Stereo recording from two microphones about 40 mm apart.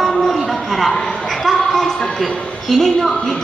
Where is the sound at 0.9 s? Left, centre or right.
Centre.